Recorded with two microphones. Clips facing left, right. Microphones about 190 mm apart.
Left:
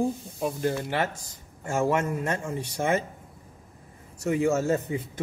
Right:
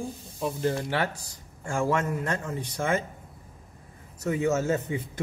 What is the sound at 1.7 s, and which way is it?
Speech, 25° left (ahead or behind).